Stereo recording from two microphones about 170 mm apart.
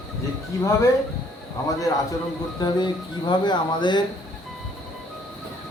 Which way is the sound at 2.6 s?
25° left (ahead or behind).